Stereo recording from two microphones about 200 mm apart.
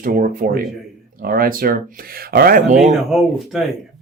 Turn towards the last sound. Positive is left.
turn(degrees=0)  # may be behind; listen again after turning